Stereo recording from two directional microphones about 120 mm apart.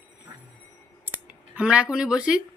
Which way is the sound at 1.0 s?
10° right (ahead or behind).